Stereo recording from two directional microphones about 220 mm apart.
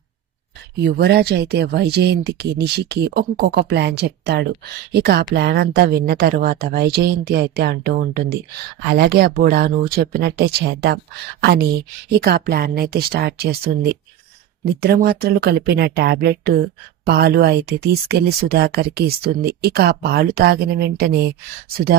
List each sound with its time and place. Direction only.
0.7 s speech: 50° right (ahead or behind)
14.6 s speech: 45° right (ahead or behind)